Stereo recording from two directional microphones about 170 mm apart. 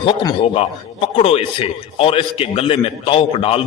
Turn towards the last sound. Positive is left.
turn(degrees=35)  # may be behind; listen again after turning